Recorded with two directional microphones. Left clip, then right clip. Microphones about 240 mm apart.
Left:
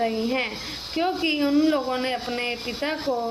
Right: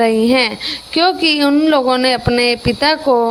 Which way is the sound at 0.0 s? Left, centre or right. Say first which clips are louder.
Right 12 dB; right.